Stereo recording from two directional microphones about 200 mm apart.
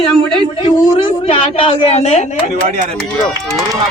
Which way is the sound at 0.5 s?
25° left (ahead or behind).